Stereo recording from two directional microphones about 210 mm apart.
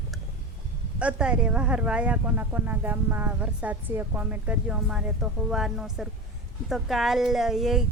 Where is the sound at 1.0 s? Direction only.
5° right (ahead or behind).